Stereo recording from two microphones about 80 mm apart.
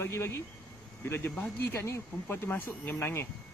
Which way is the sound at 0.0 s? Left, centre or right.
Left.